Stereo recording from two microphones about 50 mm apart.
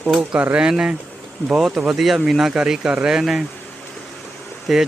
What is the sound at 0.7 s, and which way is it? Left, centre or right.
Speech, centre.